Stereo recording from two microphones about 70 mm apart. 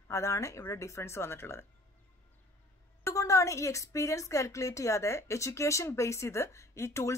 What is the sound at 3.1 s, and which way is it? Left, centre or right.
A woman's voice, left.